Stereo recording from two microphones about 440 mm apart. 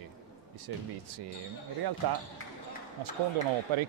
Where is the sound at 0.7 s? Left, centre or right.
Right.